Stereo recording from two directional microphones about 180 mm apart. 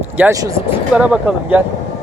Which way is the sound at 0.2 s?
15° right (ahead or behind).